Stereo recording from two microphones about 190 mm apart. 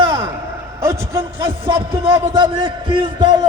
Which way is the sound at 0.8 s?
15° right (ahead or behind).